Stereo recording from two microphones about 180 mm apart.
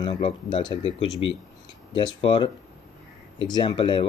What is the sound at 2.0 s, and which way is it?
Speech, 25° left (ahead or behind).